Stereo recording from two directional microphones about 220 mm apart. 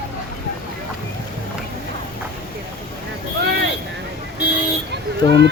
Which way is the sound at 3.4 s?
50° right (ahead or behind).